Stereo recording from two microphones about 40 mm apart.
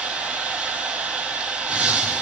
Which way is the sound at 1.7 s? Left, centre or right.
Right.